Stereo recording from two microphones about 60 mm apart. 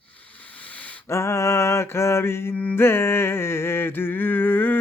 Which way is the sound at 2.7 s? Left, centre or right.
Left.